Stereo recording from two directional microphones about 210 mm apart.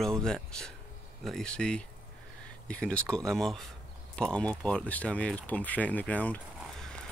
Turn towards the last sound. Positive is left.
turn(degrees=5)  # may be behind; listen again after turning